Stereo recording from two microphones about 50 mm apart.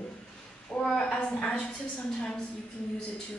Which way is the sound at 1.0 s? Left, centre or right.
Left.